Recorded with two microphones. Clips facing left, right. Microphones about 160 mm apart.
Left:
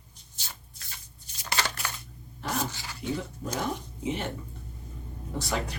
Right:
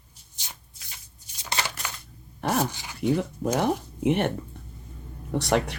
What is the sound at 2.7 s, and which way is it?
Dog, 15° right (ahead or behind).